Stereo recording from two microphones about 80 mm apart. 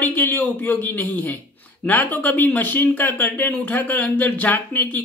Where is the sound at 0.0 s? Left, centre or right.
Left.